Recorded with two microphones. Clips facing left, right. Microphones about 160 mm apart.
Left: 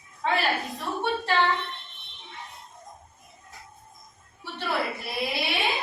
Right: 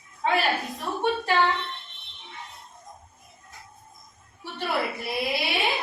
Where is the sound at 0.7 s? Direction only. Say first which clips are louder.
Right 2 dB; 15° right (ahead or behind).